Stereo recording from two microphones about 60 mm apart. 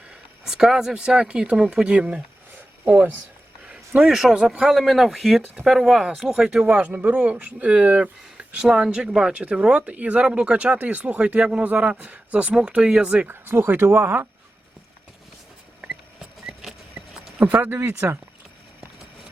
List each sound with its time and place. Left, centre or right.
0.1 s speech: centre
2.8 s speech: right
3.7 s a sound: centre
4.1 s speech: centre
6.4 s speech: centre
6.7 s speech: right
13.2 s speech: right
16.5 s a sound: centre
17.4 s speech: right
17.8 s speech: right